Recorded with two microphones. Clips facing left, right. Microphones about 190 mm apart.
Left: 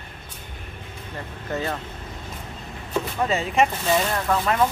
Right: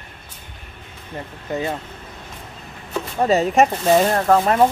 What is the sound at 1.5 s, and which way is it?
Speech, 15° right (ahead or behind).